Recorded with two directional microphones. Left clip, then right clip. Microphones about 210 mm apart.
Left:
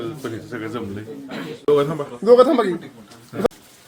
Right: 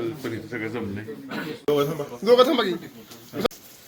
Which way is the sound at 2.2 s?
30° left (ahead or behind).